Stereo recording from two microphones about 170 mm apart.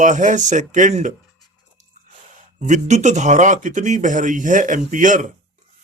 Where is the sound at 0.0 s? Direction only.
50° right (ahead or behind).